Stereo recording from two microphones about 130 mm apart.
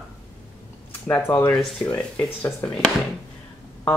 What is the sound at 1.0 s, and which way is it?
Speech, 20° left (ahead or behind).